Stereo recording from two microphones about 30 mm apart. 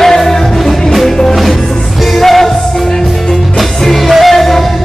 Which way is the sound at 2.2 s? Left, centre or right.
Centre.